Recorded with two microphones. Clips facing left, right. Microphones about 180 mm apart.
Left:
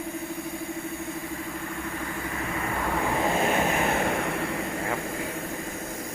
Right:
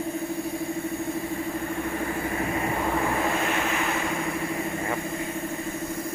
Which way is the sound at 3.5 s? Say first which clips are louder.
Left 2 dB; 45° left (ahead or behind).